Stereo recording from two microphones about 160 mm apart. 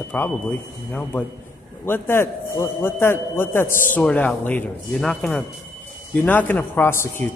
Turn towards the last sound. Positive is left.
turn(degrees=15)  # may be behind; listen again after turning